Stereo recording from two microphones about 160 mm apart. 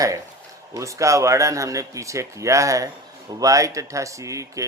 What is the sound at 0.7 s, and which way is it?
Speech, 20° right (ahead or behind).